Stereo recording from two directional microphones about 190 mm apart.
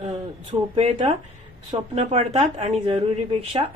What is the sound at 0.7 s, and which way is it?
A woman's voice, 30° right (ahead or behind).